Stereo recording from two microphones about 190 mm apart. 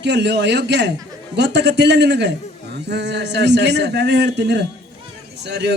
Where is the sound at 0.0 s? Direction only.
65° right (ahead or behind).